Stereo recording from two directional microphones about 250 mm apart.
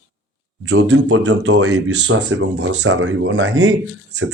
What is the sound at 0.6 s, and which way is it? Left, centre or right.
Speech, right.